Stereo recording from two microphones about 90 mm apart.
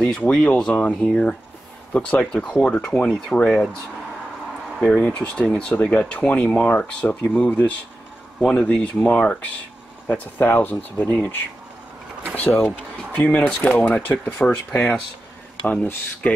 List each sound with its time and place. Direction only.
0.0 s speech: 10° left (ahead or behind)
4.7 s speech: 15° left (ahead or behind)
12.4 s speech: 20° left (ahead or behind)